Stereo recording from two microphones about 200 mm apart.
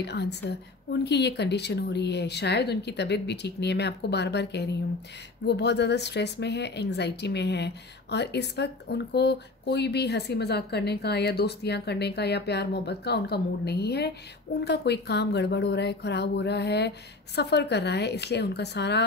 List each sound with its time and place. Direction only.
0.0 s a woman's voice: 55° left (ahead or behind)